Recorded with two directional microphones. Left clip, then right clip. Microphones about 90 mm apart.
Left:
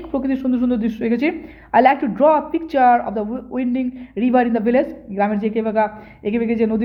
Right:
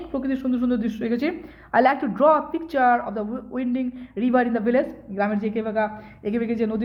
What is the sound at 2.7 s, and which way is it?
A woman's voice, 35° left (ahead or behind).